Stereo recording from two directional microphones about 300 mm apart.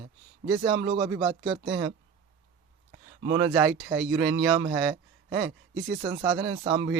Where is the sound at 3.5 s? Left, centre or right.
Centre.